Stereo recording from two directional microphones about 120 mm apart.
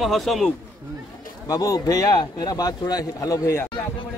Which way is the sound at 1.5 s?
30° left (ahead or behind).